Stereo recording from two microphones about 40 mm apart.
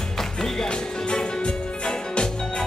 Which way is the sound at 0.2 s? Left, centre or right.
Centre.